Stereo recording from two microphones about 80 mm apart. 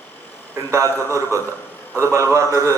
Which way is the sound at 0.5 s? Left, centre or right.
Right.